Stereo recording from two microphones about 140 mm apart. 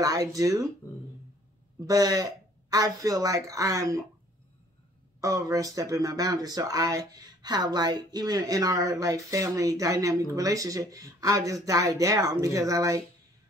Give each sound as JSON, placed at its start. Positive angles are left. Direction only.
{"t": 0.0, "sound": "speech", "side_deg": -25}
{"t": 1.8, "sound": "speech", "side_deg": -25}
{"t": 5.2, "sound": "speech", "side_deg": -25}